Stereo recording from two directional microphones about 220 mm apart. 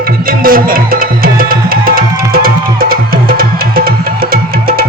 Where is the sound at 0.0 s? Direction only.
40° right (ahead or behind).